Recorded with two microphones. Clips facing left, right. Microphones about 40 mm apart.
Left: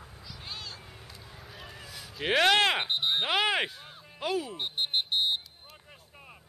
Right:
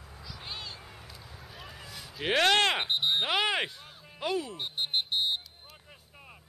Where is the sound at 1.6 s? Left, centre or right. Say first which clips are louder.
Even; centre.